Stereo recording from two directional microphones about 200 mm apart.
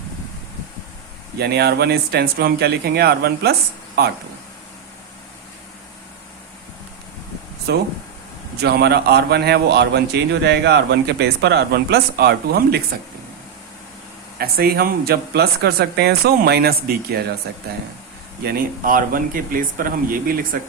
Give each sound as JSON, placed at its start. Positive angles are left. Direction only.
{"t": 1.4, "sound": "speech", "side_deg": -55}
{"t": 8.6, "sound": "a man's voice", "side_deg": -55}
{"t": 14.3, "sound": "speech", "side_deg": -50}
{"t": 18.4, "sound": "speech", "side_deg": -45}